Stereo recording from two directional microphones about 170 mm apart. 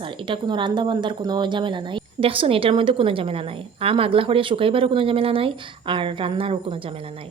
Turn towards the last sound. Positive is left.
turn(degrees=-30)  # may be behind; listen again after turning